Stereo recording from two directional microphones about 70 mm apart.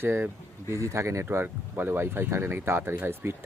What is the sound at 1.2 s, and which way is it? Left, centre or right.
Speech, right.